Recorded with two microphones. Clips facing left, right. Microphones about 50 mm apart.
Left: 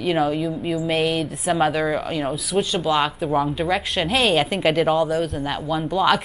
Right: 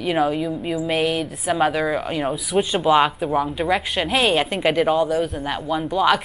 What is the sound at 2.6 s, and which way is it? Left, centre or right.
Speech, centre.